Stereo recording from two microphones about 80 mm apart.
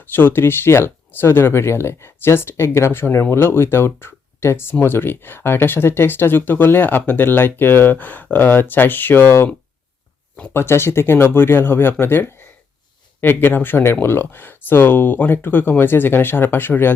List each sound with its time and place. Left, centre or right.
0.1 s speech: left
10.5 s speech: left